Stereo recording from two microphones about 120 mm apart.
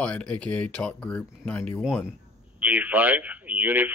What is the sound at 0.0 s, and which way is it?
Speech, 10° left (ahead or behind).